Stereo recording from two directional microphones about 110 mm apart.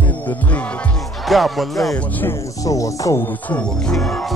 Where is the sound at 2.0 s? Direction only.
15° left (ahead or behind).